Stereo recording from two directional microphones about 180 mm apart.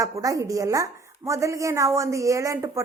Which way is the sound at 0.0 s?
20° right (ahead or behind).